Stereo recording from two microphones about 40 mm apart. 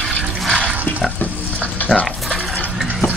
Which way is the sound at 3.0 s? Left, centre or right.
Left.